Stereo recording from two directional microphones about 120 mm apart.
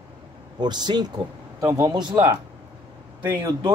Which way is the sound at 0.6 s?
35° right (ahead or behind).